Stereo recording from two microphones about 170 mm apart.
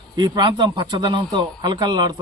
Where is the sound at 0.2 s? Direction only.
25° right (ahead or behind).